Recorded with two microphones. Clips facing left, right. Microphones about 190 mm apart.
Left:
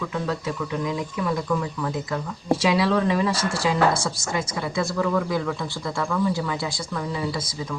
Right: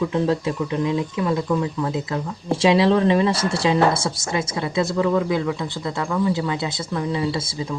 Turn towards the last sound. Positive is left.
turn(degrees=-25)  # may be behind; listen again after turning